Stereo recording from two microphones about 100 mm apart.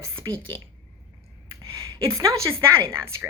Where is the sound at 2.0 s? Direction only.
30° right (ahead or behind).